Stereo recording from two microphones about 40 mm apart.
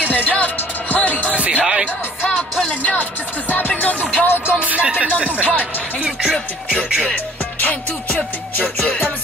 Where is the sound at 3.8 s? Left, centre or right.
Left.